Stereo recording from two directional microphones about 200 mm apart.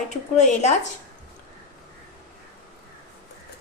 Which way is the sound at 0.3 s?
35° left (ahead or behind).